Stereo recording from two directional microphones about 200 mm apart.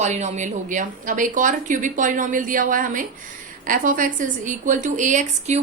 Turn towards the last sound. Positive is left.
turn(degrees=-35)  # may be behind; listen again after turning